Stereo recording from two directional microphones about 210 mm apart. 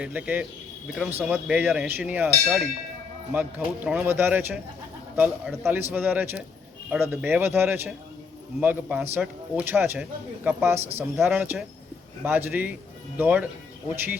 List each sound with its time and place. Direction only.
0.0 s a man's voice: 5° right (ahead or behind)